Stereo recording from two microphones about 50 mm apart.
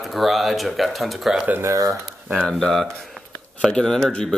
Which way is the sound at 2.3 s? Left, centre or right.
Centre.